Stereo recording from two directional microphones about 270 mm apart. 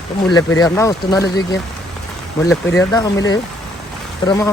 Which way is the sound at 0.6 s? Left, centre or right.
Centre.